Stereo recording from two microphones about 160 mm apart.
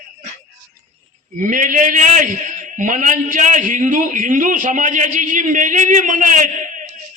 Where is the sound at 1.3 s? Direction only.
55° right (ahead or behind).